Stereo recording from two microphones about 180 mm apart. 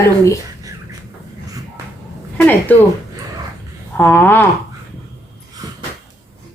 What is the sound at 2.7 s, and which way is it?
Speech, 10° left (ahead or behind).